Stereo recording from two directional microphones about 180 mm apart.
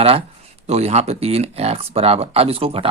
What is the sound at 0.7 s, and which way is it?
Speech, 35° right (ahead or behind).